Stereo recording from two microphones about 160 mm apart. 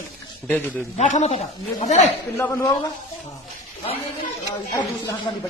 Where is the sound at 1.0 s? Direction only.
45° left (ahead or behind).